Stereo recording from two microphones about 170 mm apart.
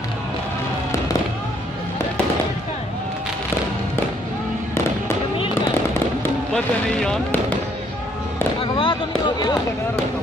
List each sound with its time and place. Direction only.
6.5 s speech: 5° left (ahead or behind)
8.7 s speech: 30° left (ahead or behind)